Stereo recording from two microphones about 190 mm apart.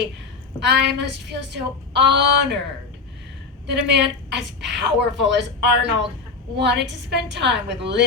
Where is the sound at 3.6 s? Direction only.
65° right (ahead or behind).